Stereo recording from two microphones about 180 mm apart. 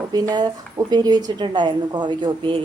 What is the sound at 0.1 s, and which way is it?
A woman's voice, 20° right (ahead or behind).